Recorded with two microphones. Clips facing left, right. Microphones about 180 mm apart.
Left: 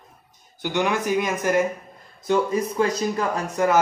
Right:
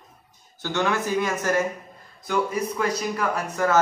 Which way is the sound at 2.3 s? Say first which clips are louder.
Left 3 dB; 30° left (ahead or behind).